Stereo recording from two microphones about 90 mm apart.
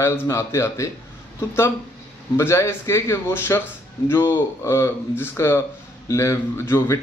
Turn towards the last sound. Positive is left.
turn(degrees=30)  # may be behind; listen again after turning